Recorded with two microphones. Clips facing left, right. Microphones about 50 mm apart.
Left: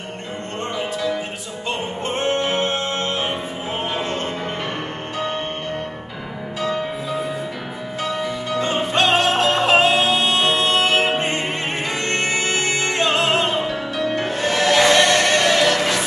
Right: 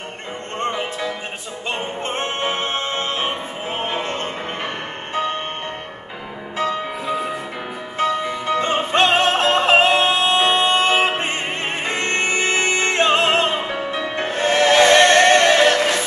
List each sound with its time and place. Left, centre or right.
0.6 s music: right
3.8 s music: right
8.0 s music: right
11.1 s music: right